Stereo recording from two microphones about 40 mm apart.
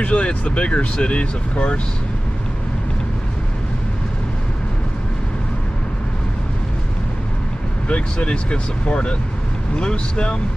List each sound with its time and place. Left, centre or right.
0.0 s speech: left
7.9 s speech: left